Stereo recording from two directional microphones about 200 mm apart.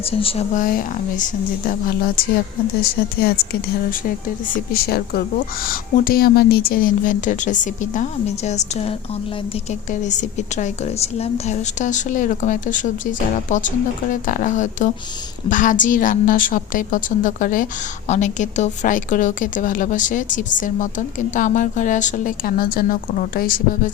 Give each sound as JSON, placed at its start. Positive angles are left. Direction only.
{"t": 0.0, "sound": "a woman's voice", "side_deg": 30}